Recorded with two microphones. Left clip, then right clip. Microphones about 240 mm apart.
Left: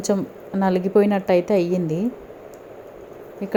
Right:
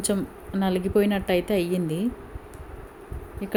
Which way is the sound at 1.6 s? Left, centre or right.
Centre.